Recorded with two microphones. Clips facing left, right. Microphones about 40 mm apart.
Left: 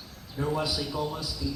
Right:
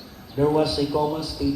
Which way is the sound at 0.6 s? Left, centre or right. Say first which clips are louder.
Right 8 dB; centre.